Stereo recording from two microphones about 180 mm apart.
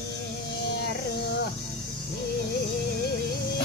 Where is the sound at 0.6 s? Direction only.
65° left (ahead or behind).